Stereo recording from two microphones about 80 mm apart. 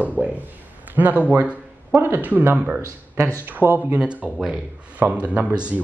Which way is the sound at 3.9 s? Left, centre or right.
Centre.